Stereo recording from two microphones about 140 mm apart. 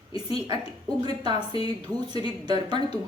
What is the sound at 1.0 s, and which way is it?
A woman's voice, 30° right (ahead or behind).